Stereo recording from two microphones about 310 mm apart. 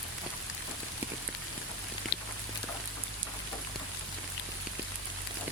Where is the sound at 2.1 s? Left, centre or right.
Left.